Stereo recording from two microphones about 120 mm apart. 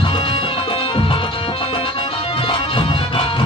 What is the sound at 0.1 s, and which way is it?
Music, 50° left (ahead or behind).